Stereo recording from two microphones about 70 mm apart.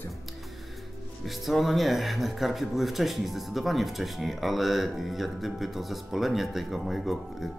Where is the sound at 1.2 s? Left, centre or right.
Centre.